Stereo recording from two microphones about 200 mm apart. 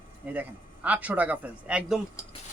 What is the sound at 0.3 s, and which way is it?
A man's voice, 10° right (ahead or behind).